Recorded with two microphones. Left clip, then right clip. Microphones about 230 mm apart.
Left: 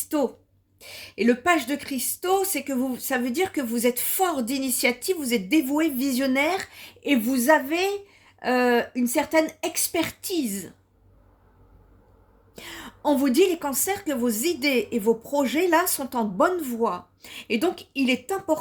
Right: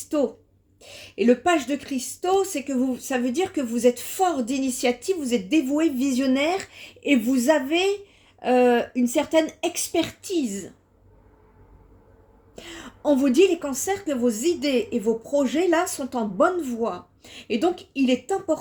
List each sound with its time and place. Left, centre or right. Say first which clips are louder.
0.8 s a woman's voice: right 1 dB; left
12.5 s a woman's voice: even; left